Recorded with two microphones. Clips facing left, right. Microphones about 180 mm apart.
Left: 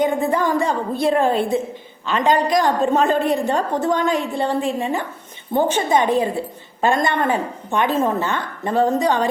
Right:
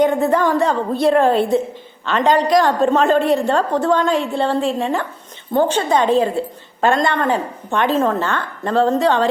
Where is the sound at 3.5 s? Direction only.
15° left (ahead or behind).